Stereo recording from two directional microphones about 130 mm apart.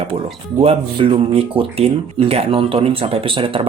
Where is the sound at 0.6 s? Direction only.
45° right (ahead or behind).